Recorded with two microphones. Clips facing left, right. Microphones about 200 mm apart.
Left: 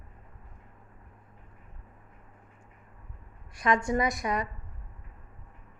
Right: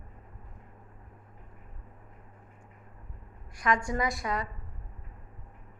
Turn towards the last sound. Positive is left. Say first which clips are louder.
# left 2 dB
turn(degrees=20)  # may be behind; listen again after turning